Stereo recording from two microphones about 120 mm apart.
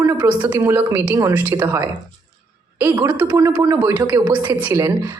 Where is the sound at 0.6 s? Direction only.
20° right (ahead or behind).